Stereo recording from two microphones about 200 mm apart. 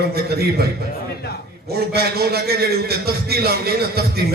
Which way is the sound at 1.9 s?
50° right (ahead or behind).